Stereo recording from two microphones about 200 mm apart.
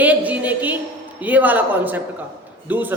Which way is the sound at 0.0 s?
10° right (ahead or behind).